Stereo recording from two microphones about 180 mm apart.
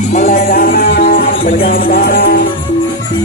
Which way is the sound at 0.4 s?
55° left (ahead or behind).